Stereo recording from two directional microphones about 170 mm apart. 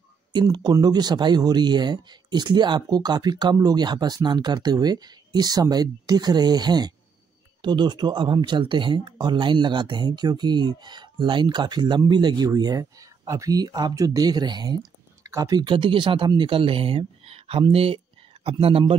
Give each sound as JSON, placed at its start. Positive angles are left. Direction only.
{"t": 0.3, "sound": "speech", "side_deg": -25}